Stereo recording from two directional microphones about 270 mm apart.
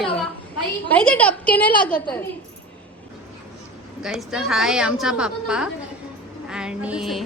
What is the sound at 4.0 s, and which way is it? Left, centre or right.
A woman's voice, centre.